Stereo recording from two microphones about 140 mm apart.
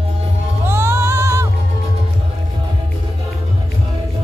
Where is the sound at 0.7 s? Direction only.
20° right (ahead or behind).